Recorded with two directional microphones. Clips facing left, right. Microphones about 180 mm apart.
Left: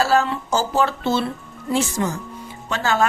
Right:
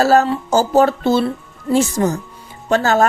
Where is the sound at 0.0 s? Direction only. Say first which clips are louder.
Right 5 dB; 40° right (ahead or behind).